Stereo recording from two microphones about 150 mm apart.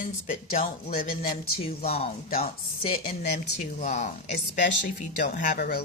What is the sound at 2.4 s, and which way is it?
Speech, 40° left (ahead or behind).